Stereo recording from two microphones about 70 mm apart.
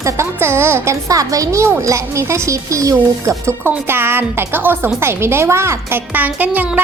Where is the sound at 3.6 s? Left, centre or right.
Right.